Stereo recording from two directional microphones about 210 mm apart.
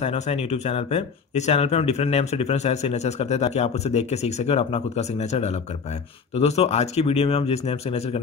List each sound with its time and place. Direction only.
0.0 s speech: 30° left (ahead or behind)